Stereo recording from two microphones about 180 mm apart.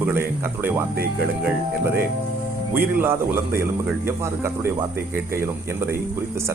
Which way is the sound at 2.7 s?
10° right (ahead or behind).